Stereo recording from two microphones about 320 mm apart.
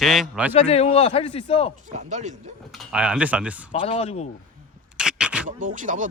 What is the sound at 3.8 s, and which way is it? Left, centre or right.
Speech, centre.